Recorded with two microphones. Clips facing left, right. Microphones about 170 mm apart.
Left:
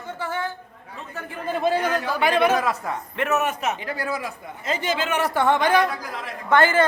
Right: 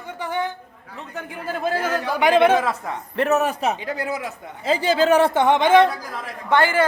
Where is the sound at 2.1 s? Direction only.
20° right (ahead or behind).